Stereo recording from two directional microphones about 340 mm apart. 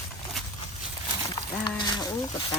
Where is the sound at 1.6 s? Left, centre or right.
Centre.